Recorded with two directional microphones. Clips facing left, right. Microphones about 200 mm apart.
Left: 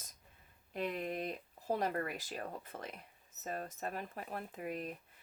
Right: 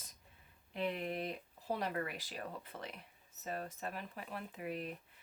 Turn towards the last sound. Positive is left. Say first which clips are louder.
# left 1 dB
turn(degrees=45)  # may be behind; listen again after turning